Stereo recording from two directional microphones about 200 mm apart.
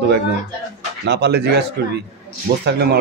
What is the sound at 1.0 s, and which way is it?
Speech, 55° right (ahead or behind).